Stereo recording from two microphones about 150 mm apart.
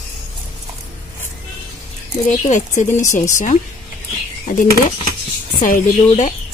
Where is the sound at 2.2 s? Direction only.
50° left (ahead or behind).